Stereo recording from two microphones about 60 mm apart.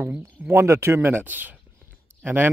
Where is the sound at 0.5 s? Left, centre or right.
Right.